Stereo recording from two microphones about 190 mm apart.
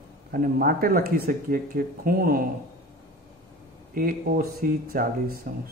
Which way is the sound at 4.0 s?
50° right (ahead or behind).